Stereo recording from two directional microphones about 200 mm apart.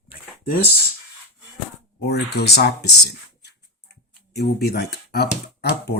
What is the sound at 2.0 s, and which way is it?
Speech, 55° left (ahead or behind).